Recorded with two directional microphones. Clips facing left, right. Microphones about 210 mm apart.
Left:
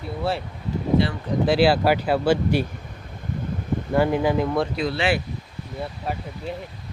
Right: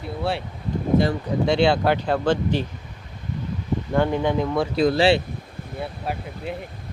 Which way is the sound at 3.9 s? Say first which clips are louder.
Left 1 dB; 5° left (ahead or behind).